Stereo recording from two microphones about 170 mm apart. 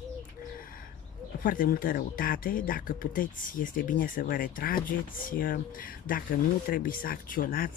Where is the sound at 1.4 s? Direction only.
55° left (ahead or behind).